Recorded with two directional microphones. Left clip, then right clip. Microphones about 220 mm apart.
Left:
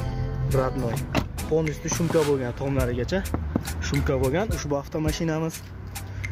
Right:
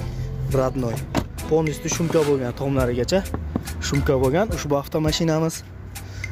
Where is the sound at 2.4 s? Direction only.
25° right (ahead or behind).